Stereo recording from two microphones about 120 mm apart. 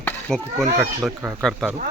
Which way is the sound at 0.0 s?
5° left (ahead or behind).